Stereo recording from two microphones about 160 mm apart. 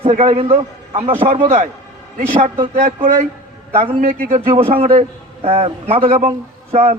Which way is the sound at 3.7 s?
40° right (ahead or behind).